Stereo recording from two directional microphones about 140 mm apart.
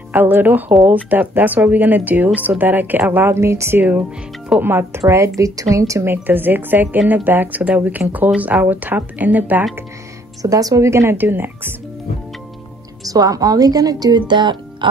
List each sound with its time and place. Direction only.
0.1 s speech: 15° right (ahead or behind)
10.4 s speech: 25° right (ahead or behind)
13.0 s speech: 25° right (ahead or behind)